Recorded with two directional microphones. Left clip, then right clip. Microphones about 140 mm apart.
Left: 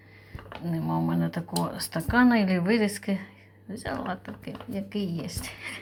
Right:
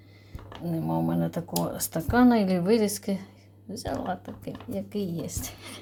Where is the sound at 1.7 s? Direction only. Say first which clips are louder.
Even; 40° right (ahead or behind).